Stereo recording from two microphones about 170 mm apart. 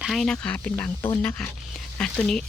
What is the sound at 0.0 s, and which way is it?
A woman's voice, centre (ahead or behind).